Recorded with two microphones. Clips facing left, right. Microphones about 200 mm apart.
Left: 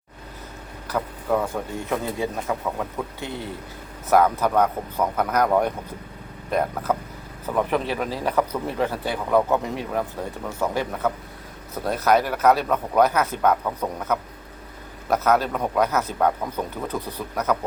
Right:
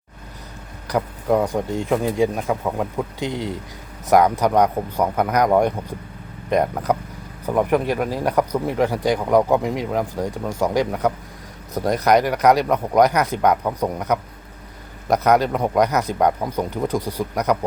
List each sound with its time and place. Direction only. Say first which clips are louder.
0.9 s speech: right 4 dB; 15° right (ahead or behind)